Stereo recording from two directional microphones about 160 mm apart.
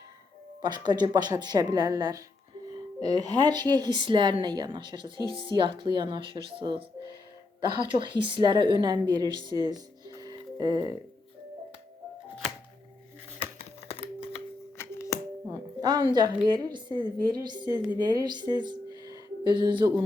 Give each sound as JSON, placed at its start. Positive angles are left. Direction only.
{"t": 0.6, "sound": "a woman's voice", "side_deg": -25}
{"t": 13.6, "sound": "typing", "side_deg": 40}
{"t": 14.8, "sound": "music", "side_deg": 20}
{"t": 15.4, "sound": "music", "side_deg": -25}
{"t": 16.1, "sound": "speech", "side_deg": -25}